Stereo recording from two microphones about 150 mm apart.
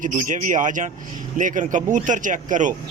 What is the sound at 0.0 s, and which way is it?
A man's voice, 60° right (ahead or behind).